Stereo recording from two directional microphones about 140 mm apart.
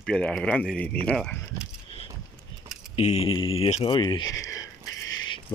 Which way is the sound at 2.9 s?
45° left (ahead or behind).